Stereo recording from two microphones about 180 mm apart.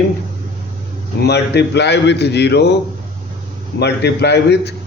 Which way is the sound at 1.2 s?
65° left (ahead or behind).